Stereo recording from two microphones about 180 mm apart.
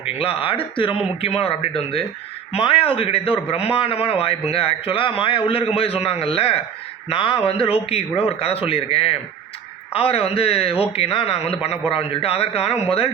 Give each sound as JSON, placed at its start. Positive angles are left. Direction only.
{"t": 0.0, "sound": "a man's voice", "side_deg": 30}